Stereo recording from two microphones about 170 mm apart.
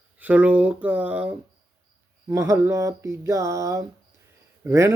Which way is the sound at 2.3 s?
15° right (ahead or behind).